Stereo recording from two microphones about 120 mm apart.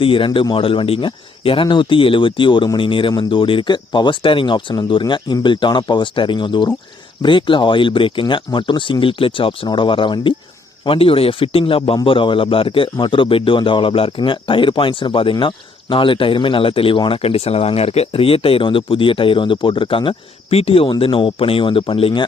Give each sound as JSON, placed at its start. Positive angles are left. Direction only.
{"t": 0.0, "sound": "a man's voice", "side_deg": 45}